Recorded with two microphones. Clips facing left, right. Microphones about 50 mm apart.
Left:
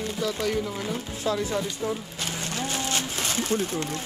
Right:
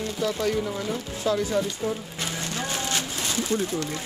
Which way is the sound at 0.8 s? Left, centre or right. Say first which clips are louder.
Right 1 dB; left.